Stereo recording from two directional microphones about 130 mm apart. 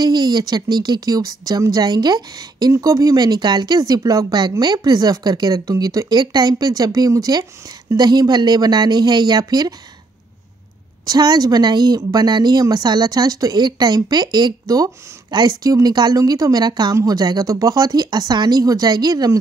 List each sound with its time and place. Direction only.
0.0 s speech: 30° right (ahead or behind)
11.1 s speech: 30° right (ahead or behind)